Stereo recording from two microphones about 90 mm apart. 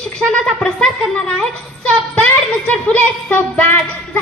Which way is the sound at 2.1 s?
15° left (ahead or behind).